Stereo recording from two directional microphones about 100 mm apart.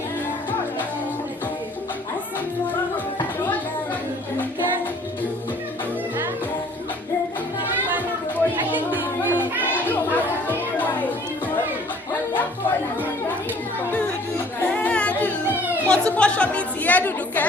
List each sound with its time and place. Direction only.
8.9 s music: 20° right (ahead or behind)
9.9 s music: 20° left (ahead or behind)
14.7 s singing: 15° left (ahead or behind)
15.9 s chatter: 10° left (ahead or behind)